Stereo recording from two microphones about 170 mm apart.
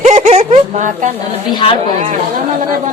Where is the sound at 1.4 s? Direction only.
30° left (ahead or behind).